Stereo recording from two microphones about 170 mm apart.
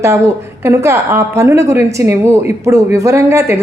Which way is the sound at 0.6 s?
15° right (ahead or behind).